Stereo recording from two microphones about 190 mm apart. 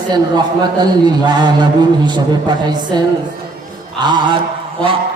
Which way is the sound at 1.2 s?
25° right (ahead or behind).